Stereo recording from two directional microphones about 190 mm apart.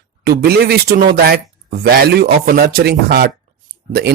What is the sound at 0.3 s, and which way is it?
Speech, 55° right (ahead or behind).